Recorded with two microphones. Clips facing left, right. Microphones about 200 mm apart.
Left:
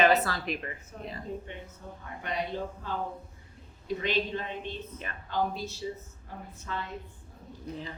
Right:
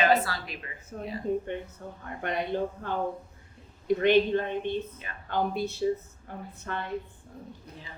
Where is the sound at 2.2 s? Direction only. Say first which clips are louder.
Right 4 dB; 55° right (ahead or behind).